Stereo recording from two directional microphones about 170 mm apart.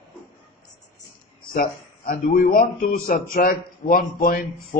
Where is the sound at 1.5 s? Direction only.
55° left (ahead or behind).